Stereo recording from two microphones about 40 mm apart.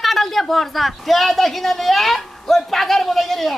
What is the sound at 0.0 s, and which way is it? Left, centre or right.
A man's voice, centre.